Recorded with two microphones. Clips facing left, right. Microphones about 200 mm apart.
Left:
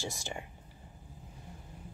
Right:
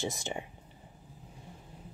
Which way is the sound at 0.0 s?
20° right (ahead or behind).